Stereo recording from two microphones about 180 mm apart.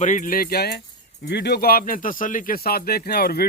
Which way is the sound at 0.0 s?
45° left (ahead or behind).